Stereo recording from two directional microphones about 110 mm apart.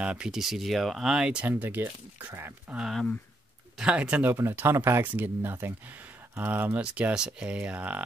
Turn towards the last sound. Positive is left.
turn(degrees=-10)  # may be behind; listen again after turning